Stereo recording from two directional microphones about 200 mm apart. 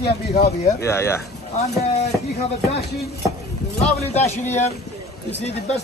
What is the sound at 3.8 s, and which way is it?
A man's voice, 35° left (ahead or behind).